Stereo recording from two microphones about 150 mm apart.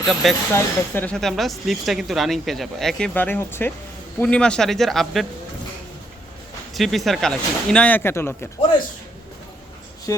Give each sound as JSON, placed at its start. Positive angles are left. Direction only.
{"t": 0.1, "sound": "speech", "side_deg": 0}
{"t": 0.5, "sound": "speech", "side_deg": 15}
{"t": 1.1, "sound": "speech", "side_deg": 0}
{"t": 6.7, "sound": "speech", "side_deg": 0}
{"t": 10.1, "sound": "speech", "side_deg": 20}